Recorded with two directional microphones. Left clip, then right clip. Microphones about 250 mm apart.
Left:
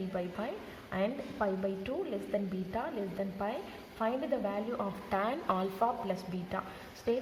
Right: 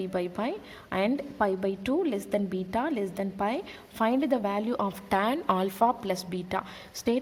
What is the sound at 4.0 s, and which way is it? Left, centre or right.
A woman's voice, right.